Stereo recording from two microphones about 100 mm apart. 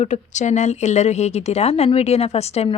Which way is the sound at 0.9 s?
90° left.